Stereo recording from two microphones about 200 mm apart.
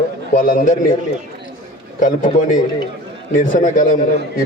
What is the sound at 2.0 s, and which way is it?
A man's voice, 40° left (ahead or behind).